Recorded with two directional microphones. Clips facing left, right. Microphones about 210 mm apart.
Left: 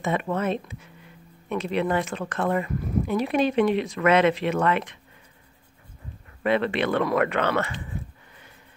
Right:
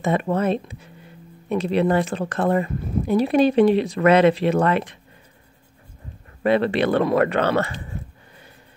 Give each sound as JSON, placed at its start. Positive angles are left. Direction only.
{"t": 0.0, "sound": "speech", "side_deg": -35}
{"t": 6.4, "sound": "speech", "side_deg": -35}